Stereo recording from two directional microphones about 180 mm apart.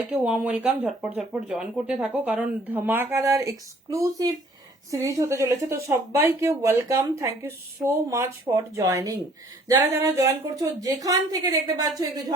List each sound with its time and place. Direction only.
0.1 s speech: 5° right (ahead or behind)